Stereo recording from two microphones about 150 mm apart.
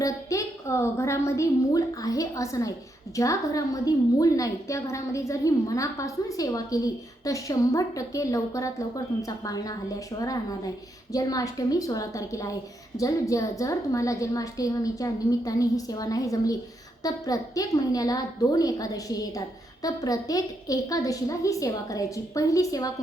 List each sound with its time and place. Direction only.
0.0 s a woman's voice: 20° left (ahead or behind)